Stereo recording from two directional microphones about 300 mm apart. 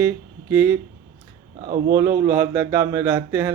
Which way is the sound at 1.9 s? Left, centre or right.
Centre.